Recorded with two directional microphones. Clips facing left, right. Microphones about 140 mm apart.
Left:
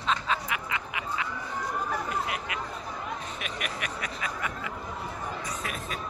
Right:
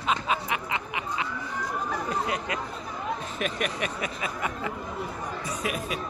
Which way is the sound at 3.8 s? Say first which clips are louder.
Right 4 dB; 25° right (ahead or behind).